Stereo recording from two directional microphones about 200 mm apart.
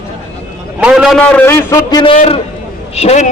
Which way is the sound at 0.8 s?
5° right (ahead or behind).